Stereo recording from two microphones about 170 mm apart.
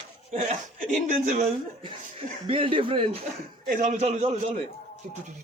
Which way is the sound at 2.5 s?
30° right (ahead or behind).